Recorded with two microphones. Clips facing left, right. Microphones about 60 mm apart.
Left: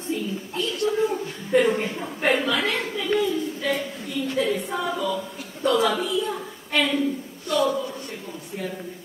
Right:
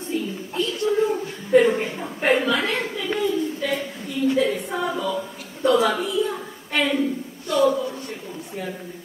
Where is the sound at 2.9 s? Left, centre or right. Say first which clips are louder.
Left 2 dB; centre.